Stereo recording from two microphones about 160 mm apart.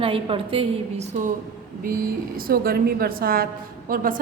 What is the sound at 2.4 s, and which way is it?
A woman's voice, 65° right (ahead or behind).